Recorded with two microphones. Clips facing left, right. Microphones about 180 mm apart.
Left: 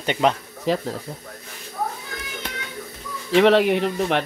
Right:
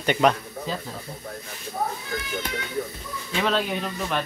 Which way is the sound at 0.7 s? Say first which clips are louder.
Left 10 dB; 85° left.